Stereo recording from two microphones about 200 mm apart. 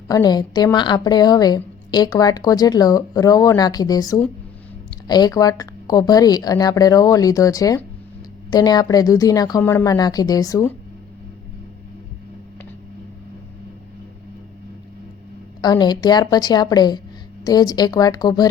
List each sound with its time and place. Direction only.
0.1 s a woman's voice: 20° left (ahead or behind)
15.6 s a woman's voice: 20° left (ahead or behind)